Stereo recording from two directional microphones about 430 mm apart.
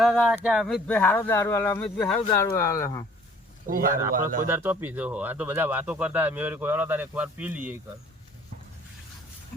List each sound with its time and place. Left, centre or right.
0.0 s speech: centre
3.7 s speech: centre
4.4 s speech: centre